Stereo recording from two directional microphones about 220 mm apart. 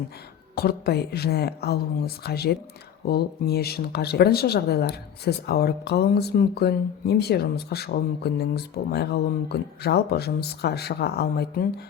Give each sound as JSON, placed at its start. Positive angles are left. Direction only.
{"t": 0.5, "sound": "speech", "side_deg": 45}